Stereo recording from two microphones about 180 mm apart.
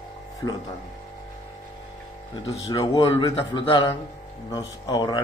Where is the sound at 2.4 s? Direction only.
30° left (ahead or behind).